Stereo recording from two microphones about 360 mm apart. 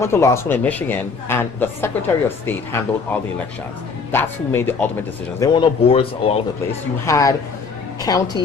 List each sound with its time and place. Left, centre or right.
0.0 s speech: centre